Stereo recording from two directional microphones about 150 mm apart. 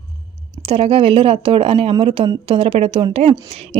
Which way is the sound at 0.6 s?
40° right (ahead or behind).